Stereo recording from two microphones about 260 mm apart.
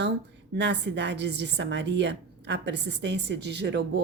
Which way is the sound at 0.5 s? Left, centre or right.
Right.